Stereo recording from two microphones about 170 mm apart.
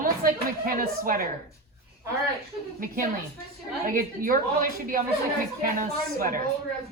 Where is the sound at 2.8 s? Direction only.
55° right (ahead or behind).